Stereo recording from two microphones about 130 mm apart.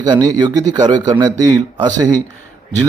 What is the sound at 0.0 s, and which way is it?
A man's voice, 30° right (ahead or behind).